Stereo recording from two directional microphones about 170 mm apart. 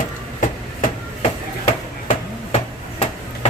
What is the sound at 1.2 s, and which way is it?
Chop, 40° left (ahead or behind).